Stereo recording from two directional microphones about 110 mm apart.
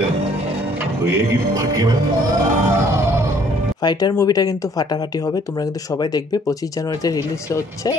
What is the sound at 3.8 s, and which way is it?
Speech, 40° left (ahead or behind).